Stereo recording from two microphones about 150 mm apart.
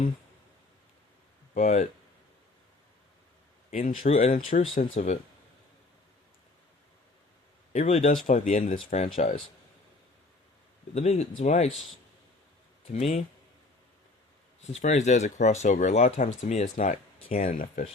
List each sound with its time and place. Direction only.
1.5 s speech: 55° left (ahead or behind)
3.7 s speech: 65° left (ahead or behind)
4.0 s speech: 40° left (ahead or behind)
7.7 s speech: 45° left (ahead or behind)
10.9 s speech: 45° left (ahead or behind)
12.9 s speech: 45° left (ahead or behind)
14.7 s speech: 50° left (ahead or behind)